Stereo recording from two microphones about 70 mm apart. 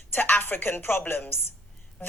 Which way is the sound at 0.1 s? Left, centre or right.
Left.